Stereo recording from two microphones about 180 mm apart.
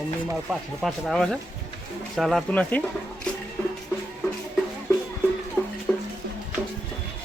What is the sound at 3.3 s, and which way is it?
Music, 5° left (ahead or behind).